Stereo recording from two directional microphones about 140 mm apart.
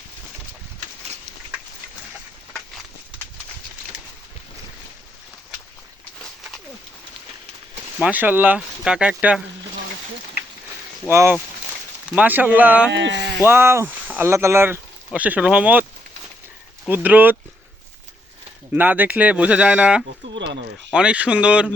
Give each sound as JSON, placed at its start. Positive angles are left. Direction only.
{"t": 8.0, "sound": "speech", "side_deg": -10}
{"t": 11.1, "sound": "speech", "side_deg": -15}
{"t": 16.9, "sound": "speech", "side_deg": -15}
{"t": 18.7, "sound": "speech", "side_deg": -10}